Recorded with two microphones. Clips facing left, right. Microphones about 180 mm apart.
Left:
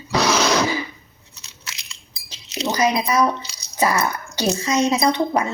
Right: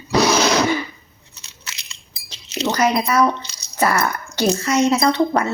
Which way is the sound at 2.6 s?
10° left (ahead or behind).